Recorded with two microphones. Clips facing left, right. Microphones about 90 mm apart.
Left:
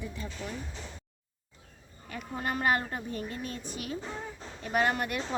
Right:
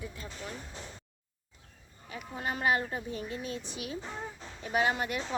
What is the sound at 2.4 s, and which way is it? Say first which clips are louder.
A woman's voice: left 1 dB; 45° left (ahead or behind).